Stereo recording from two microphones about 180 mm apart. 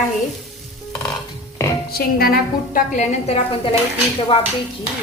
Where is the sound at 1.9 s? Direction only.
60° left (ahead or behind).